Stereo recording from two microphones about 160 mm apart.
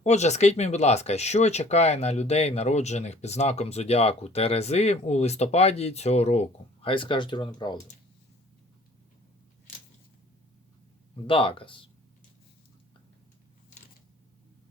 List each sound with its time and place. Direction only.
0.0 s speech: 45° left (ahead or behind); by 7.8 s 30° left (ahead or behind)
11.3 s speech: 35° left (ahead or behind)